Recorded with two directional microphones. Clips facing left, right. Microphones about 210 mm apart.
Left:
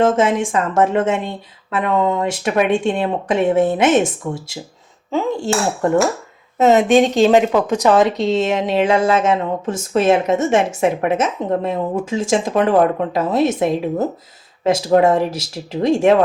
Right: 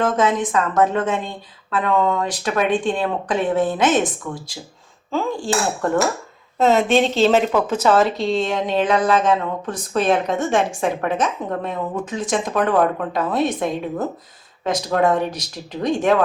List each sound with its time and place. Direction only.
0.0 s a woman's voice: 25° left (ahead or behind)